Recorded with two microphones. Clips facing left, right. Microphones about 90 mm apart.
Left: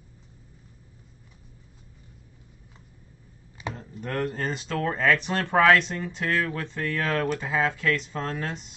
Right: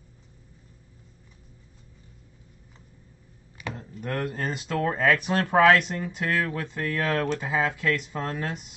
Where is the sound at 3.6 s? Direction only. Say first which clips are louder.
Left 1 dB; 25° left (ahead or behind).